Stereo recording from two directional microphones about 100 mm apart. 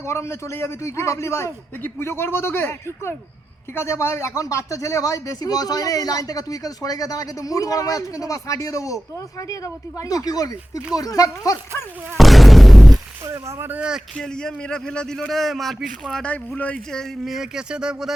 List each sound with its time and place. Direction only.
0.0 s a man's voice: 25° left (ahead or behind)
12.1 s a sound: centre (ahead or behind)
13.2 s speech: 30° right (ahead or behind)
13.7 s speech: 10° right (ahead or behind)
14.2 s speech: 5° left (ahead or behind)
16.2 s speech: 15° left (ahead or behind); by 18.1 s 10° right (ahead or behind)